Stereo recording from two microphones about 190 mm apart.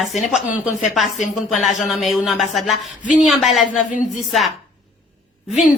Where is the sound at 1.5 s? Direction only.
40° left (ahead or behind).